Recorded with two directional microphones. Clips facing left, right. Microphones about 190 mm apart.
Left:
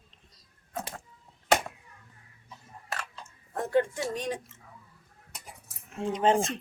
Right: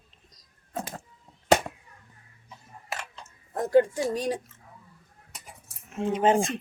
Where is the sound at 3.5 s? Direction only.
40° right (ahead or behind).